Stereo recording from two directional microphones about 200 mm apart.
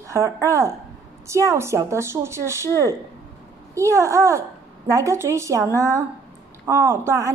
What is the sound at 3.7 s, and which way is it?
A woman's voice, 15° right (ahead or behind).